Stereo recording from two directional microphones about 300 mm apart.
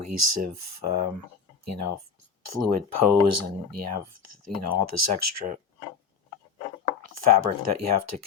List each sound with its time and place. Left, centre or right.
0.0 s speech: right
7.0 s speech: right